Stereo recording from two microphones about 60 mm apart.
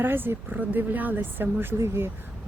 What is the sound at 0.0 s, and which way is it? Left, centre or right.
Speech, right.